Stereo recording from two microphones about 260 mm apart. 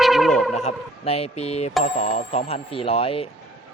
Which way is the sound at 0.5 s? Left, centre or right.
Left.